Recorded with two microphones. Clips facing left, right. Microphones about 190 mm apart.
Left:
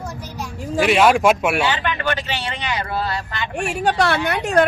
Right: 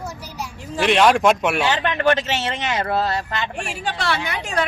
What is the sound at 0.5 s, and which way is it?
Speech, 45° left (ahead or behind).